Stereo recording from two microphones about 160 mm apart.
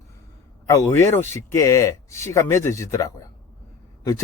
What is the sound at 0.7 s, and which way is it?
Speech, 20° left (ahead or behind).